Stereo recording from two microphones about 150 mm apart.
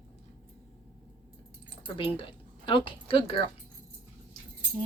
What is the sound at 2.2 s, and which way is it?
Speech, 35° left (ahead or behind).